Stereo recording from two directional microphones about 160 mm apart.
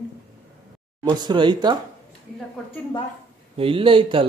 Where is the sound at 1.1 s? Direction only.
25° right (ahead or behind).